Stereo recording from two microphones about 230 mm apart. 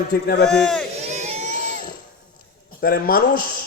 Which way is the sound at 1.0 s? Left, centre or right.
Right.